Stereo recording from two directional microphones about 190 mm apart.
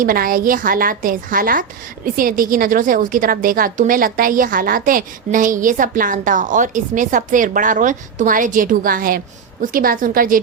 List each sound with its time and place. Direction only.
0.0 s a woman's voice: 50° right (ahead or behind)